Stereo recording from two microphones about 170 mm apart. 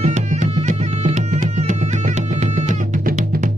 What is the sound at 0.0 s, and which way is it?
Music, 45° right (ahead or behind).